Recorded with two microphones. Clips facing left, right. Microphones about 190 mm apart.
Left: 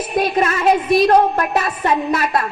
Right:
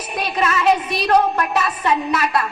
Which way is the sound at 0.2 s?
45° left (ahead or behind).